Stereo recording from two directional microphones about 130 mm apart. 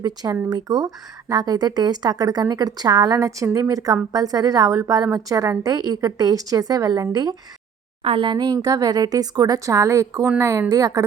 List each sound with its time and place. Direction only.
0.0 s speech: 30° right (ahead or behind)
8.0 s speech: 45° right (ahead or behind); by 11.0 s 25° right (ahead or behind)